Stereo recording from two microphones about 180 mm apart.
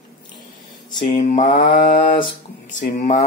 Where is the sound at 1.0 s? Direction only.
45° left (ahead or behind).